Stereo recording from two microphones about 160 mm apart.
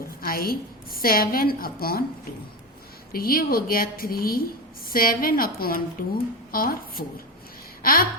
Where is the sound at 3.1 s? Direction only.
65° left (ahead or behind).